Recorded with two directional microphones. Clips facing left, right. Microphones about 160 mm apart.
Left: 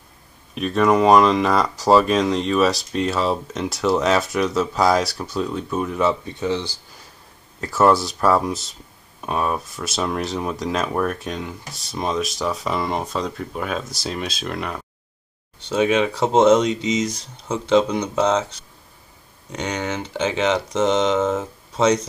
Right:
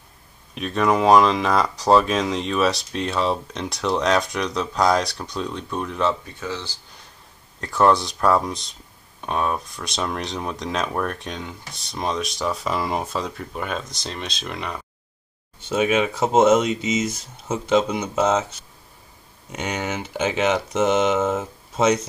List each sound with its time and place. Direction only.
0.6 s speech: centre (ahead or behind)
6.2 s speech: 20° left (ahead or behind)
7.6 s speech: 5° left (ahead or behind)